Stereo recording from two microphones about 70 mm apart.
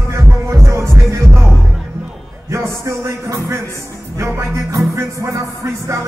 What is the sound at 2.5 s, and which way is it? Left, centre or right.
Music, right.